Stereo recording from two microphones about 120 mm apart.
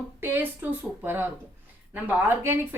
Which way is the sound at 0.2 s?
15° right (ahead or behind).